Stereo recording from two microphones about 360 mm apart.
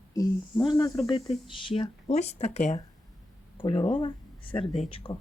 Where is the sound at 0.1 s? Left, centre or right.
Centre.